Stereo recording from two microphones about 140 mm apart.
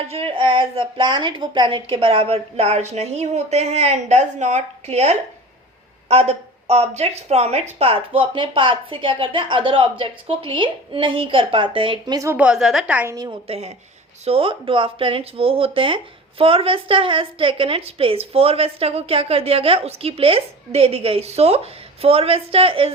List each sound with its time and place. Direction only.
0.1 s a woman's voice: 40° right (ahead or behind); by 12.4 s 25° right (ahead or behind)
12.4 s a woman's voice: 5° right (ahead or behind)
13.5 s a woman's voice: 50° right (ahead or behind)